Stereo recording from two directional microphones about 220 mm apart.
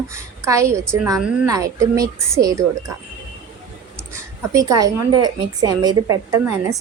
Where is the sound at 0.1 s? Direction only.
15° right (ahead or behind).